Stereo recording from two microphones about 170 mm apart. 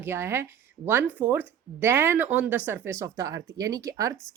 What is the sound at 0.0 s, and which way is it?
Speech, 15° right (ahead or behind).